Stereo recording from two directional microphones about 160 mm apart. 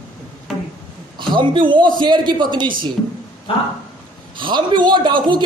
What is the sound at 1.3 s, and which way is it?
A man's voice, 30° right (ahead or behind).